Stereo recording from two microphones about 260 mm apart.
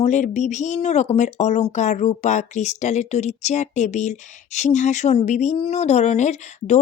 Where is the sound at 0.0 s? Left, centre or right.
Left.